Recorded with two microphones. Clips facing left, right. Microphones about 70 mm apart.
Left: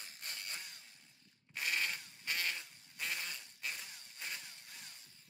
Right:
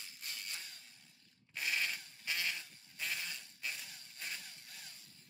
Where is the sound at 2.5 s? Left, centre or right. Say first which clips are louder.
Even; centre.